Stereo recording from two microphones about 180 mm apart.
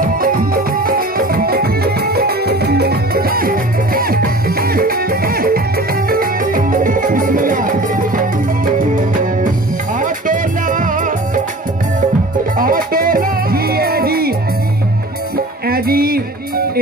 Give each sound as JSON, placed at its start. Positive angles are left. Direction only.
{"t": 0.0, "sound": "music", "side_deg": -50}
{"t": 12.5, "sound": "music", "side_deg": -50}
{"t": 15.3, "sound": "music", "side_deg": -55}